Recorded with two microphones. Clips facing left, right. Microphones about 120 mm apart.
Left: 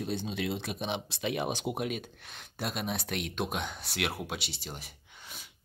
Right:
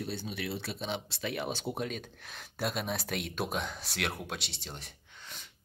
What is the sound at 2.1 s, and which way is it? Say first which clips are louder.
Speech: even; centre (ahead or behind).